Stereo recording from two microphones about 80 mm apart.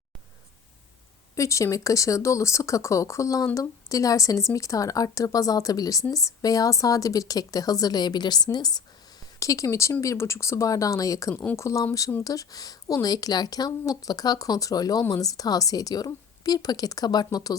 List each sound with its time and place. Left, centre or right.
1.4 s a woman's voice: left
9.4 s a woman's voice: left